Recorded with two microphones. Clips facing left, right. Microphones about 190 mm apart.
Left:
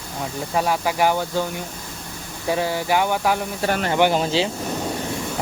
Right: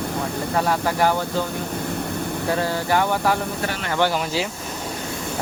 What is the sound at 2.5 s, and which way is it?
Speech, 10° left (ahead or behind).